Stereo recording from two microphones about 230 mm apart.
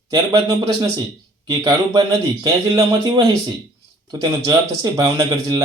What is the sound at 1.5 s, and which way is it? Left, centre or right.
Speech, centre.